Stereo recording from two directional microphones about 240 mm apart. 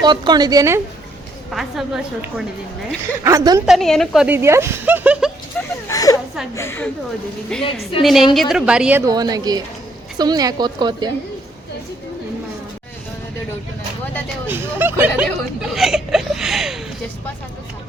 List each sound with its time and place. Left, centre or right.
0.0 s a woman's voice: centre
1.5 s a woman's voice: centre
3.2 s a woman's voice: centre
3.7 s a woman's voice: centre
5.6 s a woman's voice: centre
14.4 s a woman's voice: centre
15.7 s hiccup: centre